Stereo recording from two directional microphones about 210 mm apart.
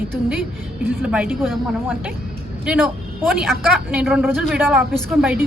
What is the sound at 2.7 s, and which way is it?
A woman's voice, 5° right (ahead or behind).